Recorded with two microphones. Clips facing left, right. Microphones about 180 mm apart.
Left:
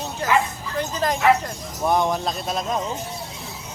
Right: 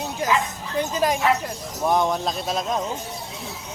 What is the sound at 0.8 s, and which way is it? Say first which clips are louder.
Speech: right 2 dB; 10° right (ahead or behind).